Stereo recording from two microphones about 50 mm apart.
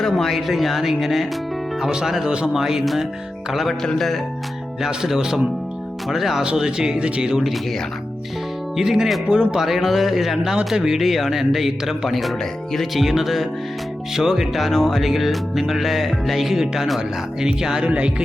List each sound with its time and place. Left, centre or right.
0.0 s a man's voice: centre
4.8 s a man's voice: centre
6.4 s speech: centre
8.7 s a man's voice: centre
9.2 s speech: centre
9.6 s a man's voice: centre
17.8 s speech: right